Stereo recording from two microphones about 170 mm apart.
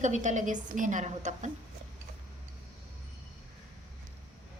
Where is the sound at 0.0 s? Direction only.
45° right (ahead or behind).